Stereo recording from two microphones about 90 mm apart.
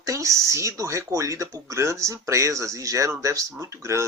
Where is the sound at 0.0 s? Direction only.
35° right (ahead or behind).